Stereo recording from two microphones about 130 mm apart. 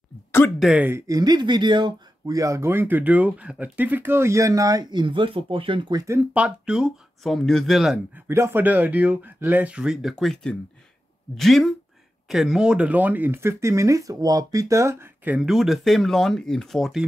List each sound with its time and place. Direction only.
0.6 s speech: 10° right (ahead or behind)
1.0 s speech: 30° right (ahead or behind)
6.0 s speech: 15° right (ahead or behind)
8.3 s speech: 20° right (ahead or behind); by 17.0 s centre (ahead or behind)